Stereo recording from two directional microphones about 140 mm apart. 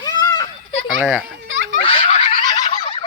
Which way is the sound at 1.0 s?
10° right (ahead or behind).